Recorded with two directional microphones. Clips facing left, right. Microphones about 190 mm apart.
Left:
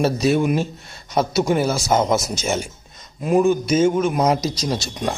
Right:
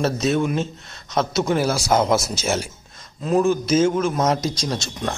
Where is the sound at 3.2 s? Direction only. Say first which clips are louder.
Left 2 dB; 10° left (ahead or behind).